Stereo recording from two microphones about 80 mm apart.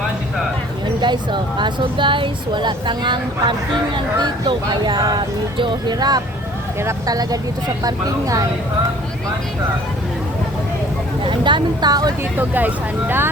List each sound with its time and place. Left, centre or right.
1.0 s speech: right
11.2 s speech: right
12.4 s speech: right